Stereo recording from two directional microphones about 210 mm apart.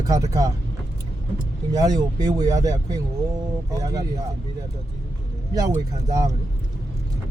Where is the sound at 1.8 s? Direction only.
20° right (ahead or behind).